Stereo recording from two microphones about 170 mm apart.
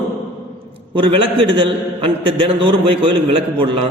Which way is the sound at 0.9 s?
30° right (ahead or behind).